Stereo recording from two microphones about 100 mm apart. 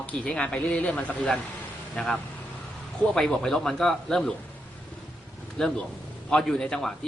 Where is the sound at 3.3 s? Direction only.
5° left (ahead or behind).